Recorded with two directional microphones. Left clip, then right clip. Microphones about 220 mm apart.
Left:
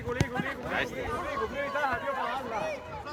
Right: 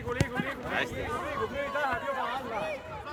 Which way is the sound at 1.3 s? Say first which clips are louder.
Even; 20° right (ahead or behind).